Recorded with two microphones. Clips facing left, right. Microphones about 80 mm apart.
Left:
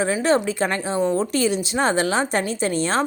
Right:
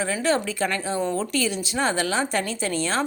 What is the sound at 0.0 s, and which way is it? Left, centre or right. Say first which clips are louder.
Speech: left 4 dB; left.